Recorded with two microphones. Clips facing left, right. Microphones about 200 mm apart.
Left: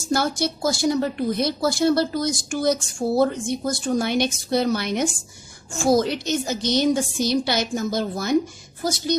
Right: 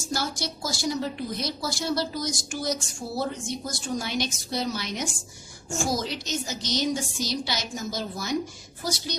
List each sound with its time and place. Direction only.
0.1 s a woman's voice: 55° left (ahead or behind)